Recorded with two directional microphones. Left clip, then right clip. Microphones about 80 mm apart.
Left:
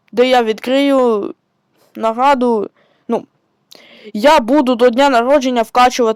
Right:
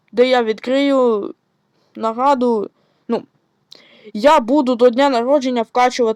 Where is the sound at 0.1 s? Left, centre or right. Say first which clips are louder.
Left 2 dB; left.